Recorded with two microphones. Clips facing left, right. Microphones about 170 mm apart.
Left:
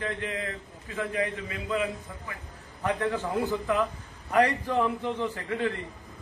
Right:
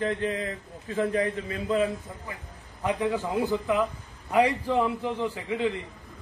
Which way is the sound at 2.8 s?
15° right (ahead or behind).